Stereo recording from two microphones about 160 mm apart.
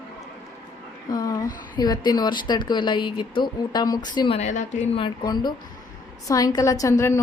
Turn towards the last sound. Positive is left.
turn(degrees=15)  # may be behind; listen again after turning